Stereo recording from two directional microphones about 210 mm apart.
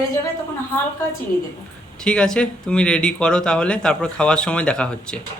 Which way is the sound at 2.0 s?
5° left (ahead or behind).